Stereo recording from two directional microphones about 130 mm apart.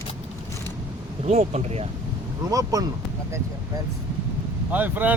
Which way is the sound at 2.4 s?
25° right (ahead or behind).